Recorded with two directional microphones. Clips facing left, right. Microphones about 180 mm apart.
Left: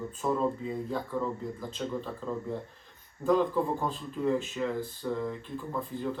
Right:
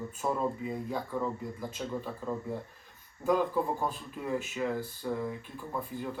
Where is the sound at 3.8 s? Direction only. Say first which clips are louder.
Left 5 dB; 10° right (ahead or behind).